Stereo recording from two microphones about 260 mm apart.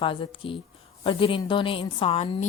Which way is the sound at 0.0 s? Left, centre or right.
Centre.